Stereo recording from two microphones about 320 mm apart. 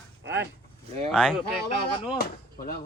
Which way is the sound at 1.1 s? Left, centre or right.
Centre.